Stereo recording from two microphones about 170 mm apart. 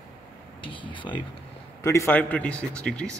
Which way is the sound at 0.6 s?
30° left (ahead or behind).